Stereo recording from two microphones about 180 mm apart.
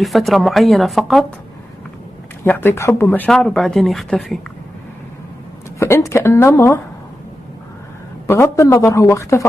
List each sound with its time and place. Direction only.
0.0 s speech: centre (ahead or behind)
2.4 s speech: 10° left (ahead or behind)
5.8 s a woman's voice: 15° left (ahead or behind)
8.3 s a woman's voice: 15° left (ahead or behind)